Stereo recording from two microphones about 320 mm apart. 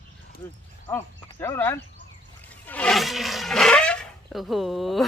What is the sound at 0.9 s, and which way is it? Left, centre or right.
Speech, centre.